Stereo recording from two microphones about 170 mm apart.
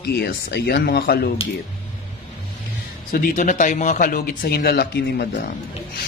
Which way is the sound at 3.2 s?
45° left (ahead or behind).